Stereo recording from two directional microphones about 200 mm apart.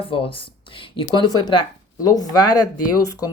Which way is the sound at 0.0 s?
25° left (ahead or behind).